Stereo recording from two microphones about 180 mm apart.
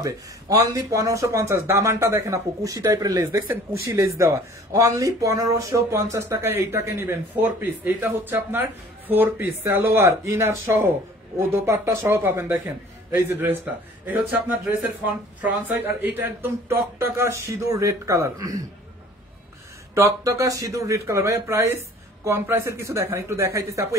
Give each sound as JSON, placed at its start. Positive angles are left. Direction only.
{"t": 0.0, "sound": "speech", "side_deg": -20}
{"t": 19.9, "sound": "speech", "side_deg": -15}